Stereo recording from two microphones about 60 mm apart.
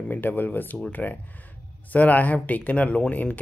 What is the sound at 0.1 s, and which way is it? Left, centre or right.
Speech, left.